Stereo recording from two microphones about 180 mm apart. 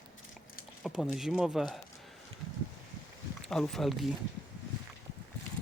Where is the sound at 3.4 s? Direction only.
5° left (ahead or behind).